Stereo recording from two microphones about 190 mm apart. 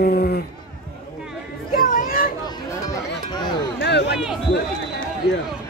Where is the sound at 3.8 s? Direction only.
65° left (ahead or behind).